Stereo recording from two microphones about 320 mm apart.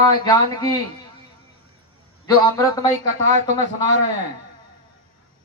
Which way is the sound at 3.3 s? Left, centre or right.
Right.